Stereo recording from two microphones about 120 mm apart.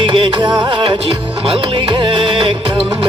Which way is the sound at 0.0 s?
45° right (ahead or behind).